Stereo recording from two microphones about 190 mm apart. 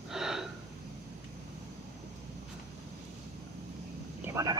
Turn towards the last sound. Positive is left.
turn(degrees=-15)  # may be behind; listen again after turning